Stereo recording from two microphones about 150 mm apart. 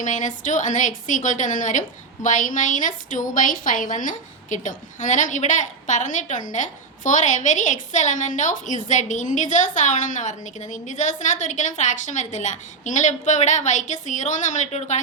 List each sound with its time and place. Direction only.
0.0 s a woman's voice: 55° left (ahead or behind)